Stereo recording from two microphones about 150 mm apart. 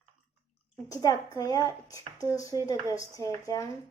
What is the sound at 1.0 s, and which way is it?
Speech, 25° left (ahead or behind).